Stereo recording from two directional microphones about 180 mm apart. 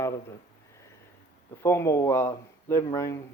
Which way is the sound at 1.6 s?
15° left (ahead or behind).